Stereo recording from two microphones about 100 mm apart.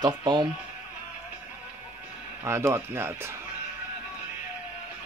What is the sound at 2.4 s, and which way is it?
Speech, 25° right (ahead or behind).